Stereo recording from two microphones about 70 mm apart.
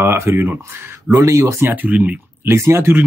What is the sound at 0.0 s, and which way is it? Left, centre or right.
Speech, right.